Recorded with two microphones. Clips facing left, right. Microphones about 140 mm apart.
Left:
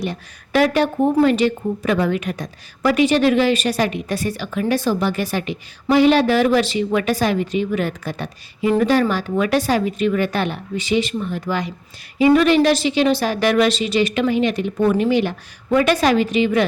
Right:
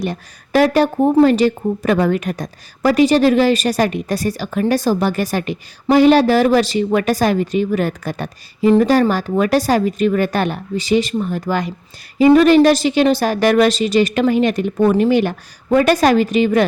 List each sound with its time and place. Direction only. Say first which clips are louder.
0.0 s a woman's voice: right 3 dB; 40° right (ahead or behind)